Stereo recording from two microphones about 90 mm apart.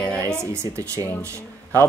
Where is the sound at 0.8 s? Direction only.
40° right (ahead or behind).